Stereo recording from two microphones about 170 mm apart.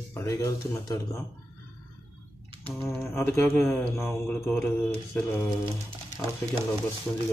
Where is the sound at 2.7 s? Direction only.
15° left (ahead or behind).